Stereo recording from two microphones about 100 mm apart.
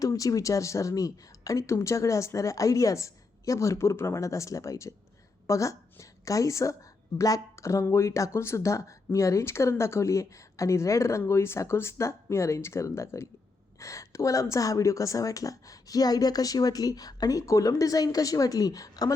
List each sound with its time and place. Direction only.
0.0 s a woman's voice: 35° left (ahead or behind)